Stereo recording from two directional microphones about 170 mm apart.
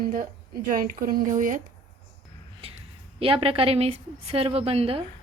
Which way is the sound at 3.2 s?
35° right (ahead or behind).